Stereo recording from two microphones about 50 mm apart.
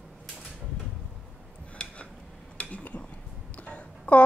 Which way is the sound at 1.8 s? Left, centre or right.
Centre.